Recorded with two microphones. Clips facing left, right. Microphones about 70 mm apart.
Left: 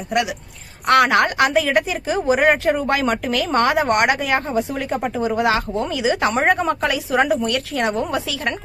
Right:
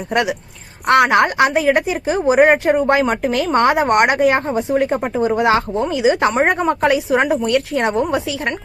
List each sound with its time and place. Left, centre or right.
0.1 s speech: right
0.9 s a woman's voice: right